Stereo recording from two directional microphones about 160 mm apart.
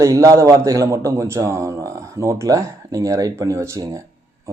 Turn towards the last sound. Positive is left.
turn(degrees=-20)  # may be behind; listen again after turning